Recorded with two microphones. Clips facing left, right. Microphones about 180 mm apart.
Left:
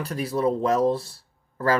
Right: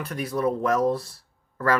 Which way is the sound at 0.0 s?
30° left (ahead or behind).